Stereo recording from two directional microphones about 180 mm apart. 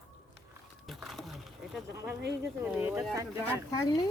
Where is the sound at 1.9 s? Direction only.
15° right (ahead or behind).